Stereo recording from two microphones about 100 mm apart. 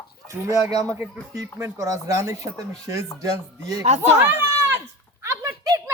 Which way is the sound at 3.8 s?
90° right.